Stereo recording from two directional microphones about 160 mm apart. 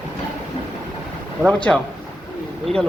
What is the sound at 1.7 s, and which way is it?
Speech, 10° left (ahead or behind).